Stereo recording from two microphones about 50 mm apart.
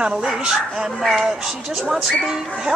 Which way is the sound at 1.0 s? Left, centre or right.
Centre.